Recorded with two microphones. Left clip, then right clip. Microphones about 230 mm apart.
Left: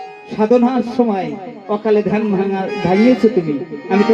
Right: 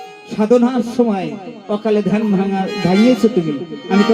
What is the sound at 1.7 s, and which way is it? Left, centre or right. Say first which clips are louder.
Speech: left 2 dB; right.